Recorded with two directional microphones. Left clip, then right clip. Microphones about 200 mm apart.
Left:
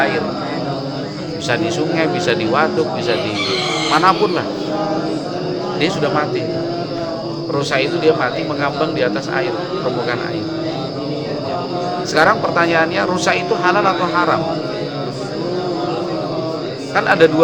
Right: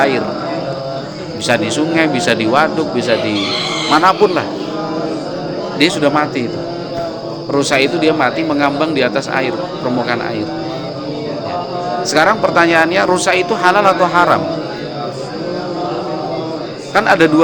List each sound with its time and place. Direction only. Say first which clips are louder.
1.5 s speech: right 3 dB; 50° right (ahead or behind)
3.9 s speech: right 4 dB; 45° right (ahead or behind)
5.8 s speech: right 5 dB; 45° right (ahead or behind)
7.5 s speech: right 4 dB; 45° right (ahead or behind)
12.1 s speech: right 2 dB; 45° right (ahead or behind)
16.9 s a man's voice: right 2 dB; 45° right (ahead or behind)